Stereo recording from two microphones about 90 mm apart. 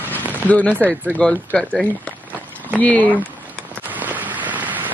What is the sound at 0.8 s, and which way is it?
Speech, 20° right (ahead or behind).